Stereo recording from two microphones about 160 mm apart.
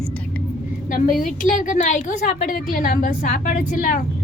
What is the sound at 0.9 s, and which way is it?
A woman's voice, 60° left (ahead or behind).